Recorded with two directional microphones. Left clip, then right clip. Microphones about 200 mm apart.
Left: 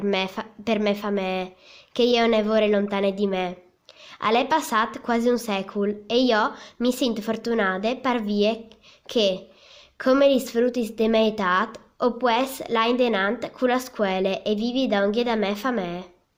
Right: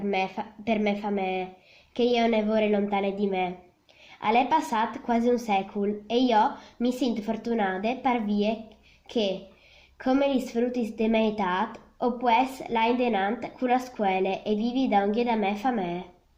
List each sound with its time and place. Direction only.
0.0 s speech: 50° left (ahead or behind)